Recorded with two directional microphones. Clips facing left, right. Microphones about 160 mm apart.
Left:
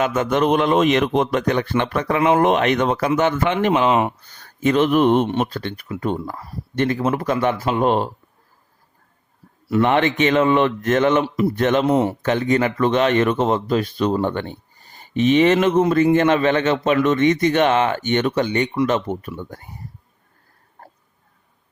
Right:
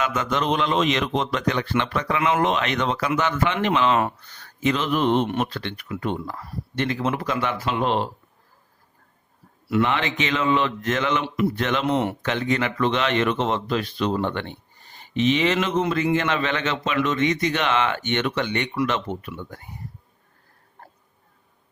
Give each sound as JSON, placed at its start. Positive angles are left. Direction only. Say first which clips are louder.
{"t": 0.0, "sound": "speech", "louder": "left 6 dB", "side_deg": 50}
{"t": 3.8, "sound": "speech", "louder": "left 3 dB", "side_deg": 15}
{"t": 4.2, "sound": "speech", "louder": "left 4 dB", "side_deg": 45}
{"t": 9.6, "sound": "speech", "louder": "left 5 dB", "side_deg": 45}